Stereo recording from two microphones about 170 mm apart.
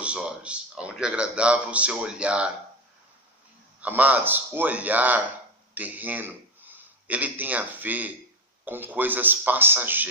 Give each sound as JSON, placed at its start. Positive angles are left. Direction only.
{"t": 0.0, "sound": "a man's voice", "side_deg": -5}
{"t": 3.8, "sound": "a man's voice", "side_deg": -10}